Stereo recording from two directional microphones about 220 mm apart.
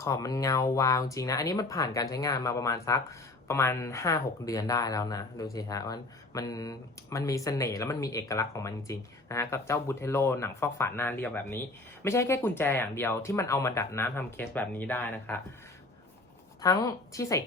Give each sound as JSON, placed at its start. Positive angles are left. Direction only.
{"t": 0.0, "sound": "speech", "side_deg": 15}
{"t": 16.6, "sound": "speech", "side_deg": 15}